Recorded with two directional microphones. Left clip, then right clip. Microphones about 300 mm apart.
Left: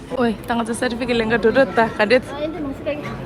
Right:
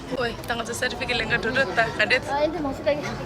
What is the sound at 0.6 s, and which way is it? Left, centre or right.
Speech, centre.